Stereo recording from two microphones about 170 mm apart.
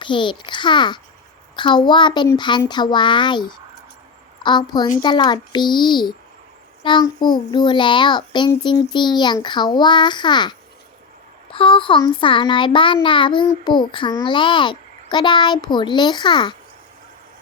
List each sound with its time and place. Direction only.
0.0 s a child's voice: 30° left (ahead or behind)
4.4 s a child's voice: 25° left (ahead or behind)
11.5 s a child's voice: 30° left (ahead or behind)